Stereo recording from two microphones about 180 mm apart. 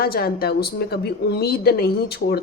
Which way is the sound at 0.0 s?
55° left (ahead or behind).